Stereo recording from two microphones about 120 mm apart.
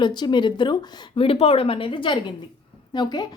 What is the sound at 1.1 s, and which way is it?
A woman's voice, 50° left (ahead or behind).